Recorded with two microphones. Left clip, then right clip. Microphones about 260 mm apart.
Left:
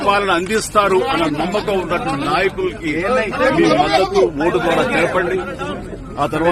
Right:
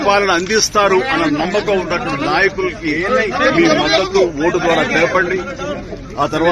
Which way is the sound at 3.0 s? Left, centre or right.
Left.